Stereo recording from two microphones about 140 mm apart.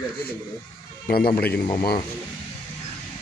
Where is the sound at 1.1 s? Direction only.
90° left.